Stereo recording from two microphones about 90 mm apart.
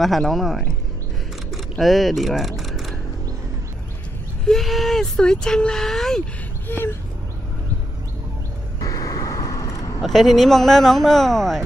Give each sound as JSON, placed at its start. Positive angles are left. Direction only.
{"t": 0.0, "sound": "speech", "side_deg": 0}
{"t": 1.5, "sound": "mechanisms", "side_deg": 0}
{"t": 4.5, "sound": "speech", "side_deg": 0}
{"t": 6.7, "sound": "speech", "side_deg": 25}
{"t": 8.8, "sound": "vehicle", "side_deg": 40}
{"t": 9.9, "sound": "speech", "side_deg": 0}